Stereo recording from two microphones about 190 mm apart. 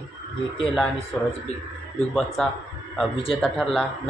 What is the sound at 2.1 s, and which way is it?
Speech, 5° left (ahead or behind).